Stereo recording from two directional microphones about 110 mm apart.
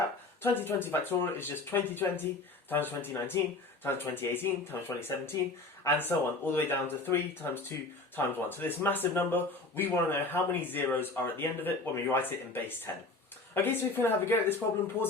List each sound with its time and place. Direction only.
0.4 s speech: 20° left (ahead or behind)
13.5 s speech: 20° left (ahead or behind)